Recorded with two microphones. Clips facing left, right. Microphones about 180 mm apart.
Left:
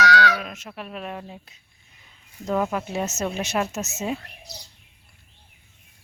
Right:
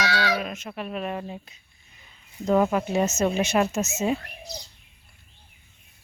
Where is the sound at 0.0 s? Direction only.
20° right (ahead or behind).